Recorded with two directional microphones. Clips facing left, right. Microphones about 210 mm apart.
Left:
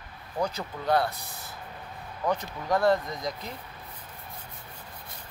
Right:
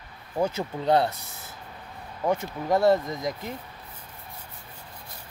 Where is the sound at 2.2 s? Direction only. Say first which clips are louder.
Right 3 dB; 25° right (ahead or behind).